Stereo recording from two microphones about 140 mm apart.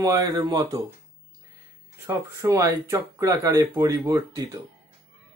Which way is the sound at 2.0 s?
20° right (ahead or behind).